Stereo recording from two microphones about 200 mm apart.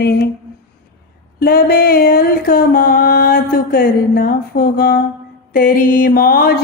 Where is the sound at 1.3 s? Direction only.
50° left (ahead or behind).